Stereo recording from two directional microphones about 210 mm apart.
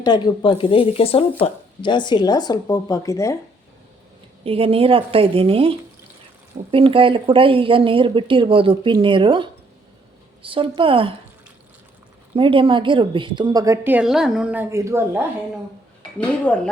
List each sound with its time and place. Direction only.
0.0 s speech: 20° left (ahead or behind)
4.4 s speech: 25° right (ahead or behind)
12.4 s a woman's voice: 25° right (ahead or behind)
16.5 s speech: 5° left (ahead or behind)